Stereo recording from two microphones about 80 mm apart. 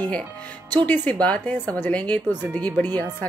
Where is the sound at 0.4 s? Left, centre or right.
Centre.